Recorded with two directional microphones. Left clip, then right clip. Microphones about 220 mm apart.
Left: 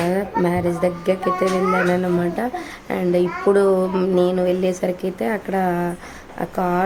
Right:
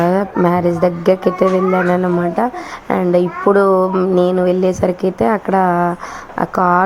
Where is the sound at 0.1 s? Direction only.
15° right (ahead or behind).